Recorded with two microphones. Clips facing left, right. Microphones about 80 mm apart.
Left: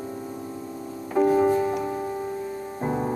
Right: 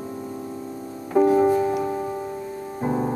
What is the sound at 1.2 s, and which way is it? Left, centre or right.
Music, centre.